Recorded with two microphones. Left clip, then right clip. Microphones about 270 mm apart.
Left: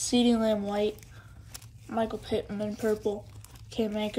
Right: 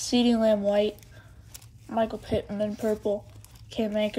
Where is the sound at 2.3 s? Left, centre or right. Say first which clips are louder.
Right 3 dB; centre.